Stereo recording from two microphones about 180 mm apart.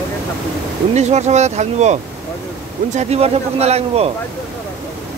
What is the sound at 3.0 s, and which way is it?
A man's voice, 35° right (ahead or behind).